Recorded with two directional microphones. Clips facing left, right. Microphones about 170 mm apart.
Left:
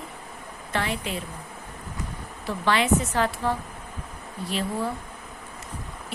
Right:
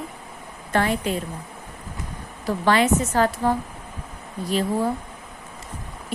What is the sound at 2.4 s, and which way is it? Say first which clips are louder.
A woman's voice: right 4 dB; 45° right (ahead or behind).